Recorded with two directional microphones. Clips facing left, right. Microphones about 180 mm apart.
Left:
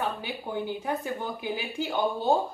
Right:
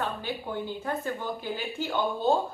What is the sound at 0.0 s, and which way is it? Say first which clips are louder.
A woman's voice: even; 15° left (ahead or behind).